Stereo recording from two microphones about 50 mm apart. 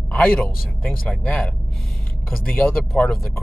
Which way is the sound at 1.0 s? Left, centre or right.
Left.